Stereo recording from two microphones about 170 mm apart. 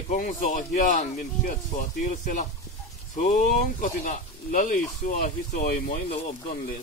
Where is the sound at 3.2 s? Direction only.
45° left (ahead or behind).